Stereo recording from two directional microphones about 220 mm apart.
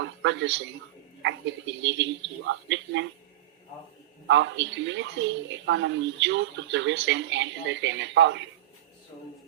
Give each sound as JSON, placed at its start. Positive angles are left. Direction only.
{"t": 0.0, "sound": "a woman's voice", "side_deg": -55}
{"t": 4.3, "sound": "a woman's voice", "side_deg": -55}